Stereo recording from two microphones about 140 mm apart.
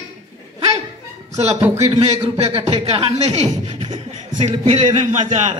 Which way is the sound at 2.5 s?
45° right (ahead or behind).